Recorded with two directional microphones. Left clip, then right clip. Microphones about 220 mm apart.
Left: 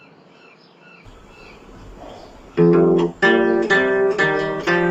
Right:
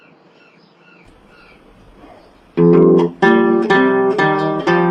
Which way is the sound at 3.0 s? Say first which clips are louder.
Right 3 dB; 20° right (ahead or behind).